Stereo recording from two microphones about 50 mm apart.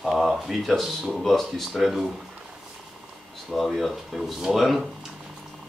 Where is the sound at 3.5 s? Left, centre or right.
Centre.